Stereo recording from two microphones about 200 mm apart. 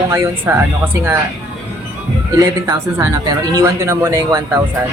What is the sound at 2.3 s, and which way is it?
Speech, 15° right (ahead or behind).